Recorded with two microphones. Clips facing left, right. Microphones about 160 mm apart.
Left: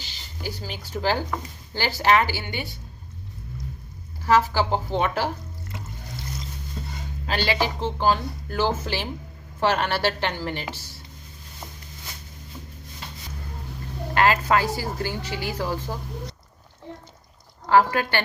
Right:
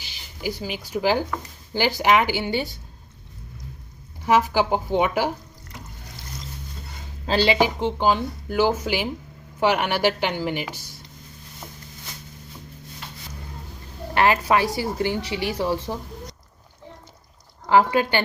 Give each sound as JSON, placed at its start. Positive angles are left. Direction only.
{"t": 0.0, "sound": "speech", "side_deg": -10}
{"t": 4.3, "sound": "speech", "side_deg": -15}
{"t": 7.3, "sound": "speech", "side_deg": -25}
{"t": 14.1, "sound": "a woman's voice", "side_deg": -20}
{"t": 17.7, "sound": "speech", "side_deg": -15}